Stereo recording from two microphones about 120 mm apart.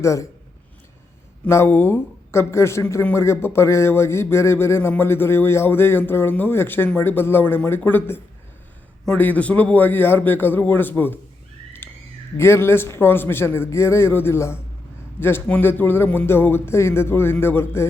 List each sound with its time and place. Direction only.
0.0 s speech: 25° left (ahead or behind)
1.5 s a man's voice: 20° left (ahead or behind)
12.4 s speech: 20° left (ahead or behind)